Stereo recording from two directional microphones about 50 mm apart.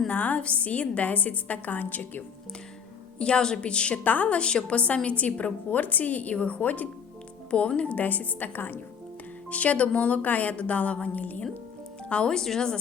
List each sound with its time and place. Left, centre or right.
0.1 s a woman's voice: left
3.2 s a woman's voice: centre; by 8.8 s left
9.5 s a woman's voice: left
12.0 s speech: left